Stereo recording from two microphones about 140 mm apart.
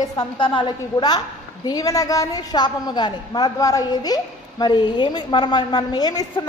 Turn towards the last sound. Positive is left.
turn(degrees=30)  # may be behind; listen again after turning